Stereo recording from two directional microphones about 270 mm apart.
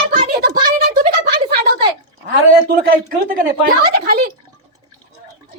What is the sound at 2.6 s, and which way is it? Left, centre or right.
Speech, right.